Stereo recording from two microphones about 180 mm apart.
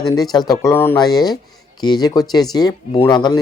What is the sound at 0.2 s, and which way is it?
Speech, 20° left (ahead or behind).